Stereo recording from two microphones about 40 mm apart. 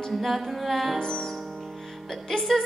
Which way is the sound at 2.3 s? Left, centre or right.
Centre.